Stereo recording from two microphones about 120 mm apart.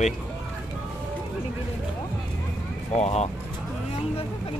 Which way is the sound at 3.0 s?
65° left (ahead or behind).